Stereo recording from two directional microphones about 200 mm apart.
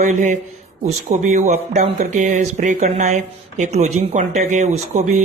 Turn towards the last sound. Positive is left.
turn(degrees=-35)  # may be behind; listen again after turning